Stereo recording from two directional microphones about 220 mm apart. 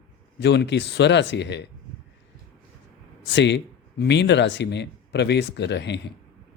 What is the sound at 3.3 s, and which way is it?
Speech, 55° left (ahead or behind).